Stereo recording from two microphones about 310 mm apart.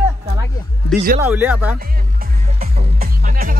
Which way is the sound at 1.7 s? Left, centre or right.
Right.